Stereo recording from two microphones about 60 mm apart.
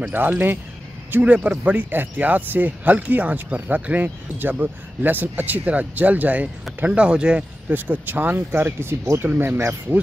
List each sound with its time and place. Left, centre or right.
0.1 s speech: right
7.7 s speech: right